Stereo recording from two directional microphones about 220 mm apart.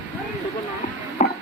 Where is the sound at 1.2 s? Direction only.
35° left (ahead or behind).